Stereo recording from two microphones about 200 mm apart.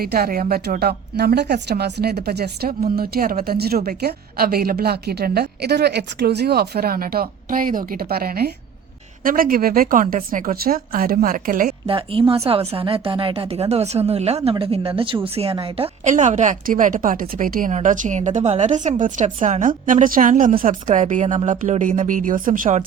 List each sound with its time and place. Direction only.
0.0 s speech: 50° right (ahead or behind)
11.9 s a woman's voice: 25° right (ahead or behind); by 22.8 s 45° right (ahead or behind)